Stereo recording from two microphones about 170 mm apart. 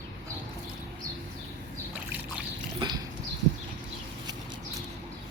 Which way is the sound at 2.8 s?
25° right (ahead or behind).